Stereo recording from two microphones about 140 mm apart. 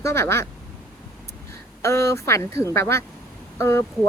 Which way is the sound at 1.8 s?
20° left (ahead or behind).